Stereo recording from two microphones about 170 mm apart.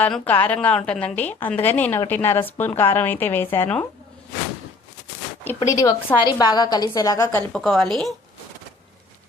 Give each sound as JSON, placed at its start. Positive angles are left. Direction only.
{"t": 0.0, "sound": "speech", "side_deg": 10}
{"t": 5.5, "sound": "a woman's voice", "side_deg": 20}
{"t": 7.5, "sound": "a woman's voice", "side_deg": 0}